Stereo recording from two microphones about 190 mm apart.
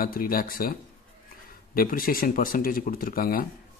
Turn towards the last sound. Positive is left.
turn(degrees=50)  # may be behind; listen again after turning